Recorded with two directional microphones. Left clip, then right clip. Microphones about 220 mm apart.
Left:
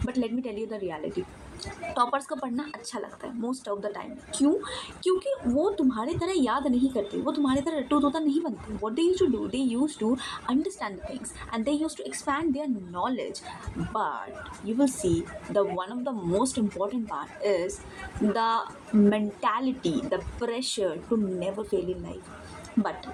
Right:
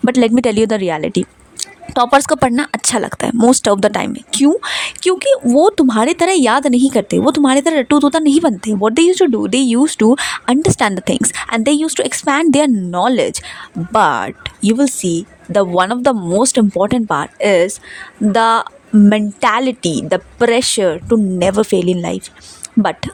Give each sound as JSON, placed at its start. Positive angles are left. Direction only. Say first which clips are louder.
{"t": 0.0, "sound": "speech", "louder": "right 18 dB", "side_deg": -55}